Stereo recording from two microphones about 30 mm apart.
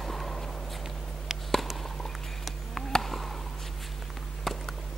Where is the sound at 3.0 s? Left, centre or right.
Centre.